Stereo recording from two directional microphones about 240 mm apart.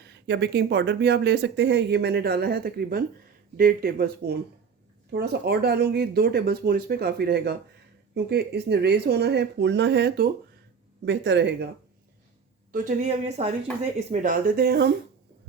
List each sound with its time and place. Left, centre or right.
0.0 s speech: right
12.7 s a woman's voice: right